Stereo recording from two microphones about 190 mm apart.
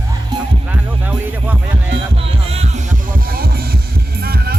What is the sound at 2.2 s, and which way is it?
Music, 30° right (ahead or behind).